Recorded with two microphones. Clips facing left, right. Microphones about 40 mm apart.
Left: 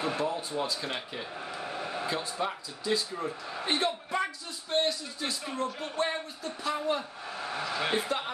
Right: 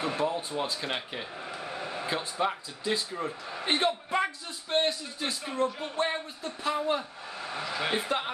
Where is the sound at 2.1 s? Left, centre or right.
Right.